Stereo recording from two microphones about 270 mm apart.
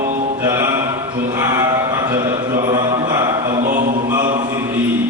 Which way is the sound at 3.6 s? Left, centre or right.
Right.